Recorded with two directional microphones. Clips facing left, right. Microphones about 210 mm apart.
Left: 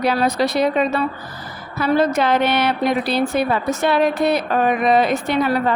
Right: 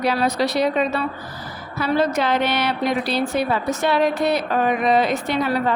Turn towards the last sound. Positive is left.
turn(degrees=55)  # may be behind; listen again after turning